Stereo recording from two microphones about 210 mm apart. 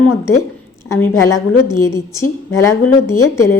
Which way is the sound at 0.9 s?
10° left (ahead or behind).